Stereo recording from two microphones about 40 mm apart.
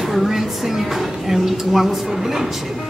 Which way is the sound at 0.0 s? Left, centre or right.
Centre.